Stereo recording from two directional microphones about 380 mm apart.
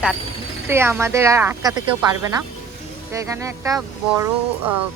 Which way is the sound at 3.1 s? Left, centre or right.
Centre.